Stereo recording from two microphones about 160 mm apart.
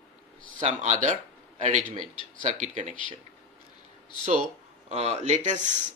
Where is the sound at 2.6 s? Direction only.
50° right (ahead or behind).